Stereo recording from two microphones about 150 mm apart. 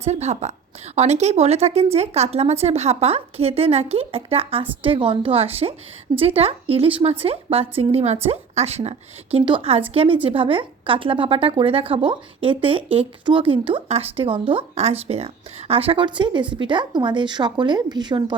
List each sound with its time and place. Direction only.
0.0 s speech: 45° right (ahead or behind); by 18.3 s 30° right (ahead or behind)